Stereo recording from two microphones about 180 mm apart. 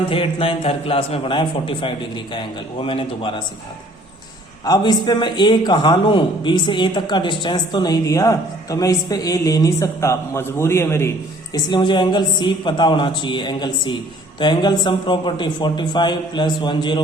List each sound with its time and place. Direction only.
0.1 s a man's voice: 30° left (ahead or behind)
4.6 s a man's voice: 20° left (ahead or behind)
11.5 s a man's voice: 25° left (ahead or behind)